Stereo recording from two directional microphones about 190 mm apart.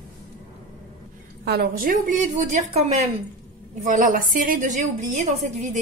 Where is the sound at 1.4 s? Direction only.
60° right (ahead or behind); by 2.8 s 40° right (ahead or behind).